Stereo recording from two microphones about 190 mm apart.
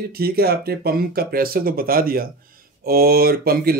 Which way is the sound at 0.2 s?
55° right (ahead or behind).